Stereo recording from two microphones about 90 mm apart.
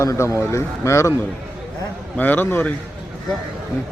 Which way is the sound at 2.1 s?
20° left (ahead or behind).